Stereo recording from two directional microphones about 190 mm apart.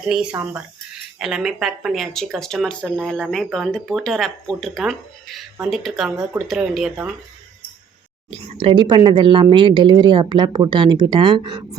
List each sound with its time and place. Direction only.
1.2 s speech: centre (ahead or behind)
8.3 s speech: 30° right (ahead or behind)